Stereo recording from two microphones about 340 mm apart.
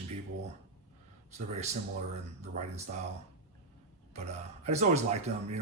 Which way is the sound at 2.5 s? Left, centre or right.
Right.